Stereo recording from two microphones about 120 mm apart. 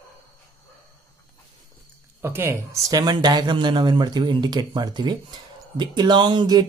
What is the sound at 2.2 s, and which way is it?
Speech, 20° right (ahead or behind).